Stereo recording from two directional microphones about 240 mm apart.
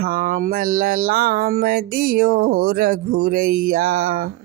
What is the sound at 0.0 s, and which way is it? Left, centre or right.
Music, right.